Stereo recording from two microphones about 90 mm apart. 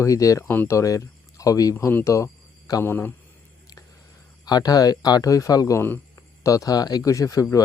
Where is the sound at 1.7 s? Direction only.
30° left (ahead or behind).